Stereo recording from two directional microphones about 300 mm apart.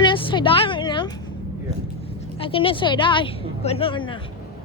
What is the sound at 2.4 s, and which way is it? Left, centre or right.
Speech, centre.